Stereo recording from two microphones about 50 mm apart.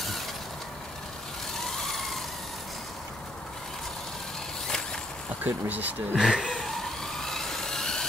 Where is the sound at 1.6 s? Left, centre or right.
Centre.